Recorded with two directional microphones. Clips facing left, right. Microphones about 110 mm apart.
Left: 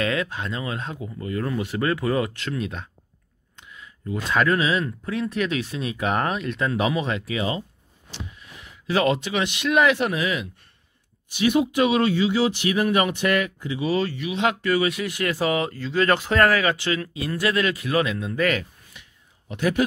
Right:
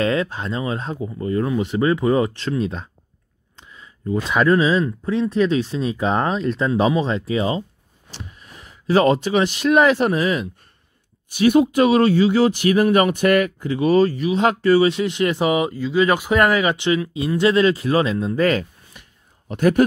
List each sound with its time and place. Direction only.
0.0 s speech: 30° right (ahead or behind)
1.4 s speech: 20° right (ahead or behind)
3.5 s a sound: 30° right (ahead or behind)
4.5 s speech: 30° right (ahead or behind)
4.8 s speech: 20° right (ahead or behind); by 14.0 s 50° right (ahead or behind)
14.0 s speech: 40° right (ahead or behind)